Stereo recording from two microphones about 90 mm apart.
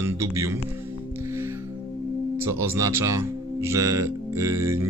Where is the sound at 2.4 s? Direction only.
30° right (ahead or behind).